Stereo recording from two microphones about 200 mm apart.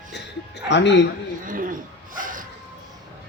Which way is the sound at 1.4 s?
45° right (ahead or behind).